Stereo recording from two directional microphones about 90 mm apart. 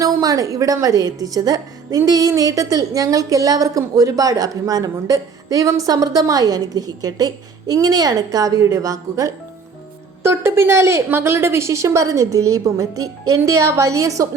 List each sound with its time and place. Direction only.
0.0 s a woman's voice: 40° right (ahead or behind)
10.2 s a woman's voice: 25° right (ahead or behind)